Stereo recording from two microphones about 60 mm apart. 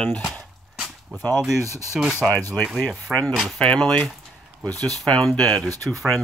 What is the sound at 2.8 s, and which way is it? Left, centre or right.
Speech, left.